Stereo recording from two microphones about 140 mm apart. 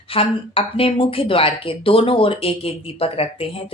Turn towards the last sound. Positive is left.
turn(degrees=45)  # may be behind; listen again after turning